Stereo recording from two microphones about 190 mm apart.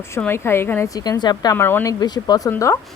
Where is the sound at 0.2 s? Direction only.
10° left (ahead or behind).